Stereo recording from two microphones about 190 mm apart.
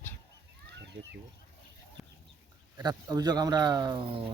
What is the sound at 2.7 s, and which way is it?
Speech, 20° right (ahead or behind).